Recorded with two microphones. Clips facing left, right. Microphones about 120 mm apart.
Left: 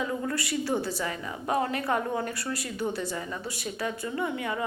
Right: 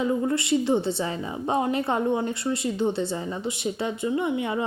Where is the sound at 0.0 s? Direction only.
25° right (ahead or behind).